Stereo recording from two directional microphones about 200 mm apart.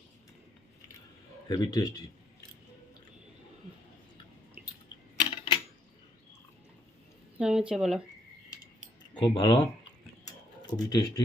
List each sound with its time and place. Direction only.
1.5 s speech: 20° left (ahead or behind)
4.6 s a sound: 5° right (ahead or behind)
5.2 s a sound: 25° left (ahead or behind)
7.3 s a woman's voice: 5° right (ahead or behind)
9.2 s speech: 20° left (ahead or behind)
10.8 s speech: 20° left (ahead or behind)